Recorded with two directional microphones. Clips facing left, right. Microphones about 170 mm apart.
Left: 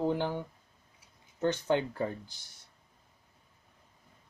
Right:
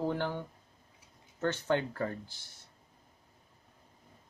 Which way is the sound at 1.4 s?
15° left (ahead or behind).